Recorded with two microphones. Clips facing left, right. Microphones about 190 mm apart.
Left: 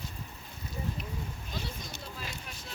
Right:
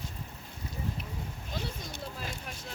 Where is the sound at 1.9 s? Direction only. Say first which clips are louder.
Right 3 dB; 50° right (ahead or behind).